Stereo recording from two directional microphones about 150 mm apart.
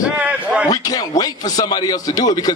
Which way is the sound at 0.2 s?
10° right (ahead or behind).